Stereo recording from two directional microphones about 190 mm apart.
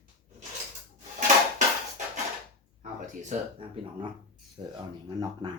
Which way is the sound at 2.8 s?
40° right (ahead or behind).